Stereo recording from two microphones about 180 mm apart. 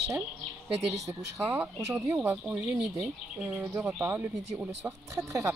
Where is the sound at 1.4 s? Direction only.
10° right (ahead or behind).